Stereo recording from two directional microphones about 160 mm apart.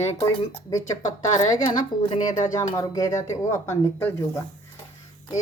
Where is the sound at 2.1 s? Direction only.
25° left (ahead or behind).